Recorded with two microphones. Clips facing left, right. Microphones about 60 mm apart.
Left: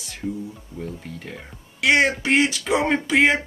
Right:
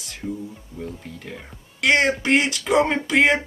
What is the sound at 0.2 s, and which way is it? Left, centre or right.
Speech, centre.